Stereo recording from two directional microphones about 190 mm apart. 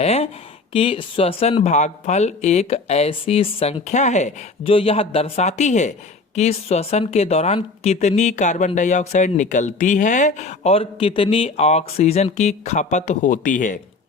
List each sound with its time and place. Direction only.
0.0 s speech: 35° left (ahead or behind)